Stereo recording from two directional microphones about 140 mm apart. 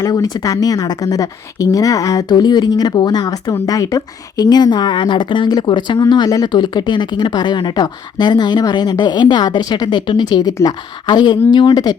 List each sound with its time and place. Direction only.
0.0 s speech: 25° left (ahead or behind)